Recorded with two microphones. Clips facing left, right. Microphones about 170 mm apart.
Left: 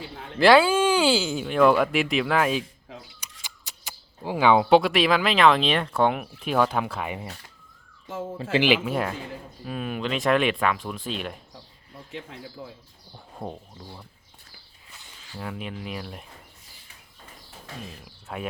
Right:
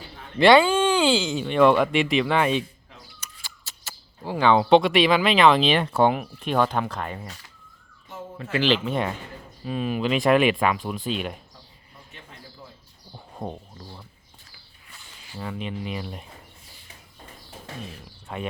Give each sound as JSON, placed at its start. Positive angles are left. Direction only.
{"t": 0.3, "sound": "speech", "side_deg": 0}
{"t": 3.4, "sound": "speech", "side_deg": 15}
{"t": 8.6, "sound": "speech", "side_deg": 10}
{"t": 12.1, "sound": "speech", "side_deg": 90}
{"t": 13.1, "sound": "speech", "side_deg": -5}
{"t": 15.4, "sound": "speech", "side_deg": 5}
{"t": 18.3, "sound": "speech", "side_deg": 0}